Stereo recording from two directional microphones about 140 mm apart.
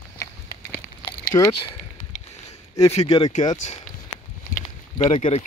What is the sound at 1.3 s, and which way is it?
Speech, 30° left (ahead or behind).